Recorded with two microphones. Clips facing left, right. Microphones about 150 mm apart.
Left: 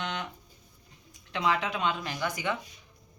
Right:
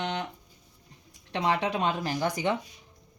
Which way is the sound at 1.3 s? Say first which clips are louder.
Right 2 dB; 30° right (ahead or behind).